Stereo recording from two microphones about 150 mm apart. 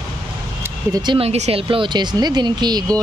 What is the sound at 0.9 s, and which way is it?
Speech, 30° right (ahead or behind).